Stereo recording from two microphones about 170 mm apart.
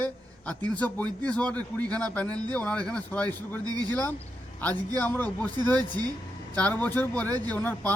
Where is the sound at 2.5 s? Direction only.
5° left (ahead or behind).